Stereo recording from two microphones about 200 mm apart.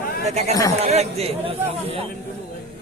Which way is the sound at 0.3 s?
35° right (ahead or behind).